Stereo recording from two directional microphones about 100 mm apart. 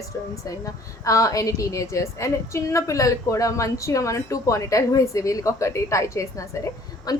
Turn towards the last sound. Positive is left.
turn(degrees=40)  # may be behind; listen again after turning